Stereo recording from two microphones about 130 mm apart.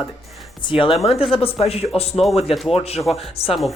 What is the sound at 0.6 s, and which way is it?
Speech, 45° left (ahead or behind).